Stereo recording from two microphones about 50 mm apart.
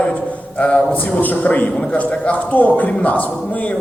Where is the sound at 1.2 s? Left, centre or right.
Left.